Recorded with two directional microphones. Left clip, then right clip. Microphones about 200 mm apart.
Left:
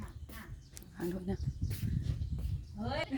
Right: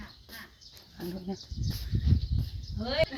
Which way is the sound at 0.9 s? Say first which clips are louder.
Even; 15° left (ahead or behind).